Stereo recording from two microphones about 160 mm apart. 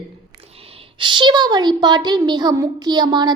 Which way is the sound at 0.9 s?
30° right (ahead or behind).